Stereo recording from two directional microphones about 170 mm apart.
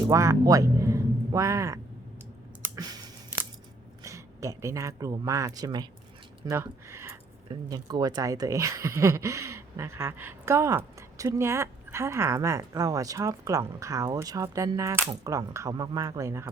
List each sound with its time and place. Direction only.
0.1 s speech: 20° right (ahead or behind)
2.6 s clicking: 20° right (ahead or behind)
4.0 s speech: 20° right (ahead or behind)
6.4 s a sound: 15° right (ahead or behind)
7.7 s speech: 25° right (ahead or behind)